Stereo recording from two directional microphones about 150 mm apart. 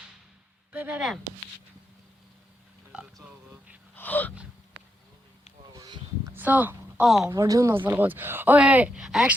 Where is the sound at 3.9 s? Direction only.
10° left (ahead or behind).